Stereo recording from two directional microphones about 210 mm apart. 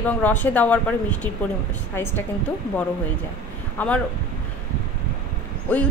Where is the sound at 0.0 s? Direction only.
10° left (ahead or behind).